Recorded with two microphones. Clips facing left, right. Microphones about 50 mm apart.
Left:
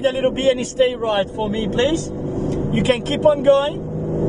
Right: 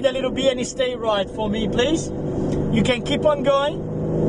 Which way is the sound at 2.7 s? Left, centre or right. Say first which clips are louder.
Left 2 dB; left.